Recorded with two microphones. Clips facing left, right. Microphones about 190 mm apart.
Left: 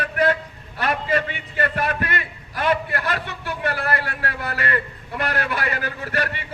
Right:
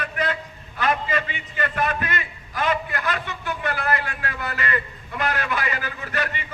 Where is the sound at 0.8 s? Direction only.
55° left (ahead or behind).